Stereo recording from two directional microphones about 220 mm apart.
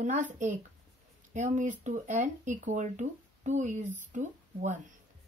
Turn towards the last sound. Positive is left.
turn(degrees=-35)  # may be behind; listen again after turning